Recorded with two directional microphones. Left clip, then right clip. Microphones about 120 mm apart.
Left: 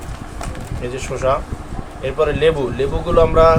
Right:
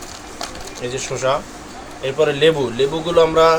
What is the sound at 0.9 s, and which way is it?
Speech, 15° right (ahead or behind).